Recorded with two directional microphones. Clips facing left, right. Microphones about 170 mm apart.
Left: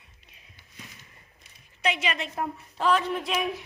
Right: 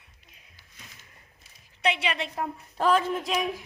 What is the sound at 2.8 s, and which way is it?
Speech, 45° right (ahead or behind).